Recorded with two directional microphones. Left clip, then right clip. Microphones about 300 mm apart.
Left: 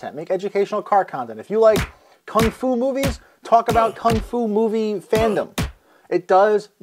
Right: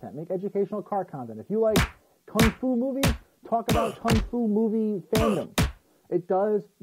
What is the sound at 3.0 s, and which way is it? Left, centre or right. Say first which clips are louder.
Music: left 4 dB; centre.